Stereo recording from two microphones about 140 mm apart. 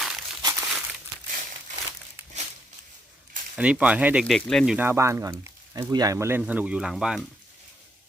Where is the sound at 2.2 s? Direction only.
15° right (ahead or behind).